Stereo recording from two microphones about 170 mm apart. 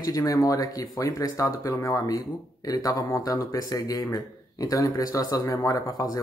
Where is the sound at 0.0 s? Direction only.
20° left (ahead or behind).